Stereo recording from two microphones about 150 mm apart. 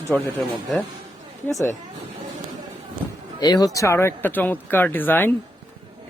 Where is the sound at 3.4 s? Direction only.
25° left (ahead or behind).